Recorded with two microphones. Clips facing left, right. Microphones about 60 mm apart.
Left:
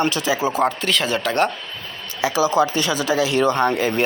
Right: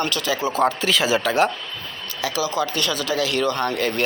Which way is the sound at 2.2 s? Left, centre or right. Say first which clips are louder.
Left 6 dB; left.